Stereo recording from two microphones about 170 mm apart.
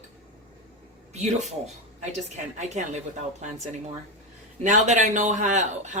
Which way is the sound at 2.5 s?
45° right (ahead or behind).